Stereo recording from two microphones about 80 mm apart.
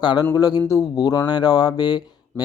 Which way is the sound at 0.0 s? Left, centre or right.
Left.